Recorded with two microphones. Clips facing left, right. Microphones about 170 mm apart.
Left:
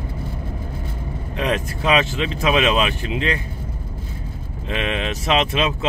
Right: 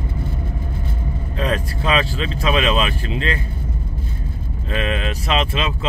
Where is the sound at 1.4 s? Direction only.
15° left (ahead or behind).